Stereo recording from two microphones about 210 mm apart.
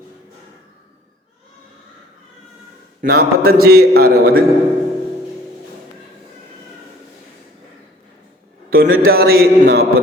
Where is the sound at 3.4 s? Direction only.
45° right (ahead or behind).